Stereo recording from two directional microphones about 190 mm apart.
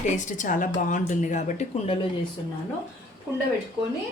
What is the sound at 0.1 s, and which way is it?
A woman's voice, 40° left (ahead or behind).